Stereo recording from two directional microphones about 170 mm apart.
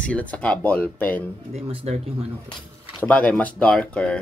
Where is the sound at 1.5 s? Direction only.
40° right (ahead or behind).